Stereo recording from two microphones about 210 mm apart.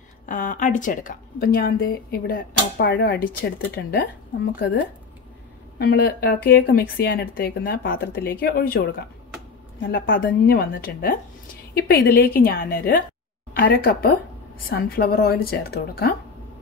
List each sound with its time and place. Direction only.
0.3 s speech: 35° left (ahead or behind)
4.6 s speech: 55° left (ahead or behind)